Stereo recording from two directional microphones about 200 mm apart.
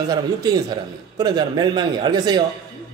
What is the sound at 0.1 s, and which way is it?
A man's voice, 20° right (ahead or behind).